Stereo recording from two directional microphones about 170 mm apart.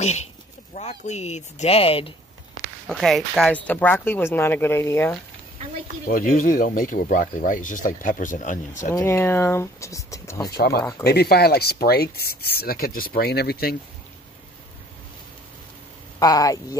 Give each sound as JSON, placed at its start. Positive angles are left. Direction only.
{"t": 0.0, "sound": "speech", "side_deg": 40}
{"t": 2.9, "sound": "speech", "side_deg": 0}
{"t": 6.0, "sound": "speech", "side_deg": 55}
{"t": 8.9, "sound": "speech", "side_deg": 15}
{"t": 10.5, "sound": "speech", "side_deg": 65}
{"t": 10.8, "sound": "speech", "side_deg": 20}
{"t": 11.1, "sound": "speech", "side_deg": 65}
{"t": 16.2, "sound": "speech", "side_deg": 20}